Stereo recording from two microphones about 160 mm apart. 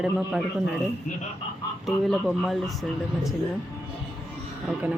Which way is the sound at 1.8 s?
Centre (ahead or behind).